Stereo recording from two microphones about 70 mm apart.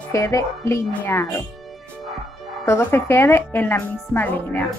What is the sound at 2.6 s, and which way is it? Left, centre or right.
Speech, left.